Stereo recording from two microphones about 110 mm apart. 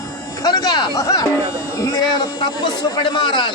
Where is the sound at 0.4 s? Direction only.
35° left (ahead or behind).